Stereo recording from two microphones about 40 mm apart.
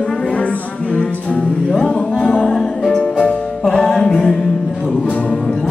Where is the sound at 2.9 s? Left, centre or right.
Left.